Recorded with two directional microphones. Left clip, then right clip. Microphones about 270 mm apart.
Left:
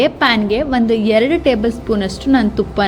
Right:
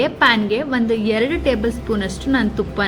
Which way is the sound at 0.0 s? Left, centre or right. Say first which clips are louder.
Left 2 dB; centre.